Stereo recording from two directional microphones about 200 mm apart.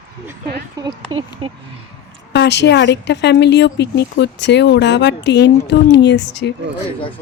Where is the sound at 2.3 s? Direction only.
60° left (ahead or behind).